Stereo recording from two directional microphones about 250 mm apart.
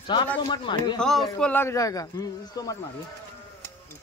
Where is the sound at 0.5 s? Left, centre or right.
Centre.